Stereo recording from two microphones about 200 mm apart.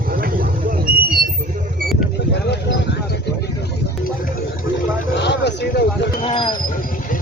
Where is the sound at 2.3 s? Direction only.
55° left (ahead or behind).